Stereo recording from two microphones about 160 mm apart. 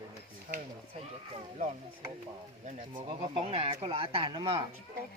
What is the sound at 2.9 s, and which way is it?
Speech, 35° right (ahead or behind).